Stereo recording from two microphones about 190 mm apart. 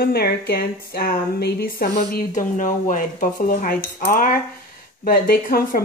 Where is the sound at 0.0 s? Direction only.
55° left (ahead or behind).